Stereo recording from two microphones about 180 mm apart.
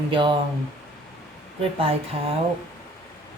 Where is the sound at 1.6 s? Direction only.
30° right (ahead or behind).